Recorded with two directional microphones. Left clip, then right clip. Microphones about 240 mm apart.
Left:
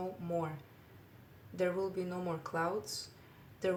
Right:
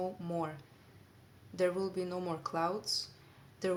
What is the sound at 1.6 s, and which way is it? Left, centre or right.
Speech, right.